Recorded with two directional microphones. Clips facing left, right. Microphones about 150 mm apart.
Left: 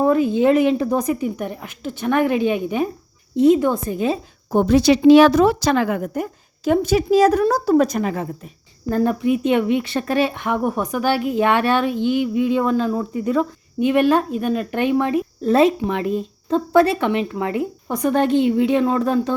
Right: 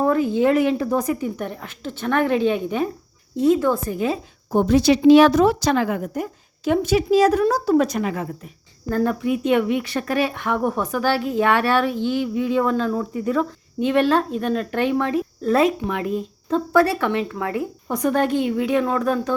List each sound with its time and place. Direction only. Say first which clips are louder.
0.0 s a woman's voice: left 2 dB; 20° left (ahead or behind)
4.5 s a woman's voice: left 2 dB; 70° left (ahead or behind)
6.7 s a woman's voice: left 2 dB; 40° left (ahead or behind)
8.9 s speech: left 3 dB; 20° left (ahead or behind)